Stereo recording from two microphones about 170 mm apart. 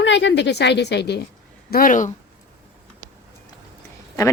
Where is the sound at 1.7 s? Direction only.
55° left (ahead or behind).